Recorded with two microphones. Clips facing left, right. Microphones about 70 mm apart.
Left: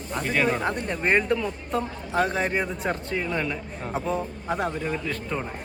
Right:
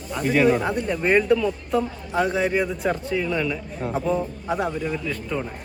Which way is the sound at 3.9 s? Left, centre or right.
Centre.